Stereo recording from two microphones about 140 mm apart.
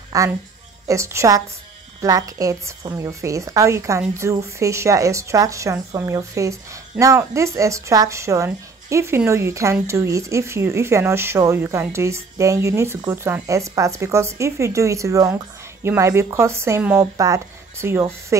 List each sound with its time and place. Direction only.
0.1 s speech: 25° right (ahead or behind)